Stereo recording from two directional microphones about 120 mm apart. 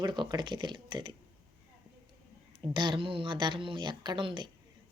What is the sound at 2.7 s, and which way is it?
A woman's voice, 40° right (ahead or behind).